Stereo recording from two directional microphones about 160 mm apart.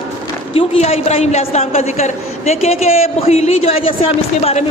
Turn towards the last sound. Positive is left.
turn(degrees=40)  # may be behind; listen again after turning